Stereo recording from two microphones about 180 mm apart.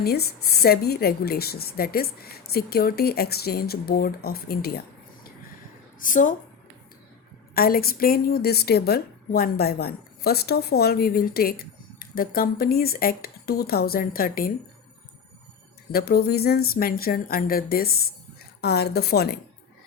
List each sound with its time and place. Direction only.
0.0 s a woman's voice: 60° left (ahead or behind)
6.0 s a woman's voice: 45° left (ahead or behind)
7.5 s a woman's voice: 55° left (ahead or behind)
15.9 s a woman's voice: 60° left (ahead or behind)